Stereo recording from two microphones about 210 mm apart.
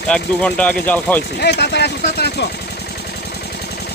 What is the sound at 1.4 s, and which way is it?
Speech, 50° left (ahead or behind).